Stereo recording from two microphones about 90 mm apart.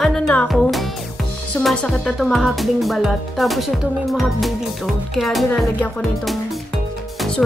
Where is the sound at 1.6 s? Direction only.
5° left (ahead or behind).